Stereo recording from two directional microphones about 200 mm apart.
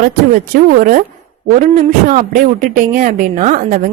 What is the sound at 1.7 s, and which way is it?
A woman's voice, 40° right (ahead or behind).